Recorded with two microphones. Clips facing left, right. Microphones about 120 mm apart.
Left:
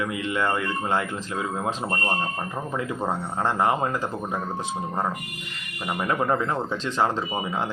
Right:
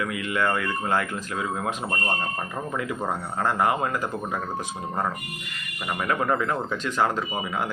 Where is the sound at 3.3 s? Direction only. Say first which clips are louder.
Even; 25° left (ahead or behind).